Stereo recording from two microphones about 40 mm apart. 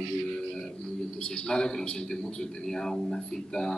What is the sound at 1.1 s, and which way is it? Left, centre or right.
A man's voice, left.